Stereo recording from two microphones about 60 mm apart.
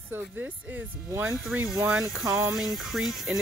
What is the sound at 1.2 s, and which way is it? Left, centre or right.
Speech, right.